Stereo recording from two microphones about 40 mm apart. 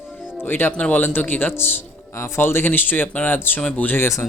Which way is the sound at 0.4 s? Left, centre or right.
Left.